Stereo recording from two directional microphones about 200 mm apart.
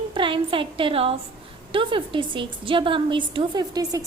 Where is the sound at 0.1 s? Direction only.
25° right (ahead or behind).